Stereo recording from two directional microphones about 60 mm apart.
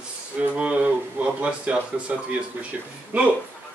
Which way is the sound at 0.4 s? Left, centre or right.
Right.